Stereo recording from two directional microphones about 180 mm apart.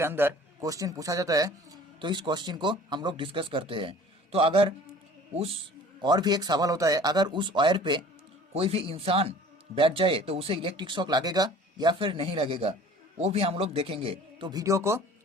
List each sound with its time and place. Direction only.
0.0 s a man's voice: 10° right (ahead or behind)